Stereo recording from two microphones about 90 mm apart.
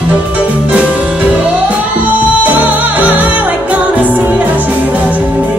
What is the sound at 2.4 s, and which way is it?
Music, 20° right (ahead or behind).